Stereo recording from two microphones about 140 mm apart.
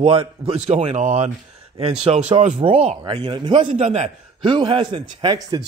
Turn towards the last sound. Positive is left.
turn(degrees=-30)  # may be behind; listen again after turning